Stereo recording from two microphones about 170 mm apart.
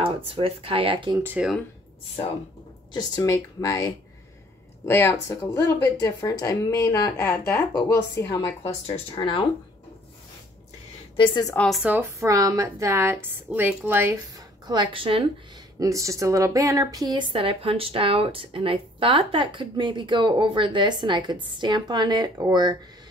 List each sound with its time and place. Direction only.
0.0 s speech: 30° right (ahead or behind)
1.2 s a woman's voice: 10° right (ahead or behind)
2.9 s speech: 20° left (ahead or behind)
8.4 s speech: 35° left (ahead or behind)
11.1 s speech: 25° left (ahead or behind)
11.5 s speech: 5° left (ahead or behind)
11.8 s a woman's voice: 10° right (ahead or behind)
14.7 s speech: 30° right (ahead or behind)
15.8 s a woman's voice: 20° right (ahead or behind)